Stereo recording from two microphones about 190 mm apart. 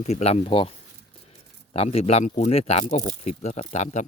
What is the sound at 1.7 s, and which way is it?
Speech, 30° left (ahead or behind).